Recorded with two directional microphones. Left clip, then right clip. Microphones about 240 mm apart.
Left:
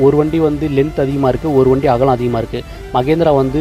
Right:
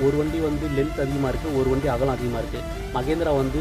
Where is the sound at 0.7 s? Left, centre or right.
Left.